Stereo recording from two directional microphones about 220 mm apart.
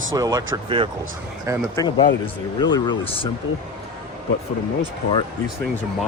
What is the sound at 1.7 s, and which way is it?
Speech, 20° left (ahead or behind).